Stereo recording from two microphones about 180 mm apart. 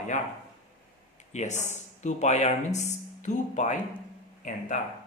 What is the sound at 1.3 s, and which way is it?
Speech, 40° left (ahead or behind).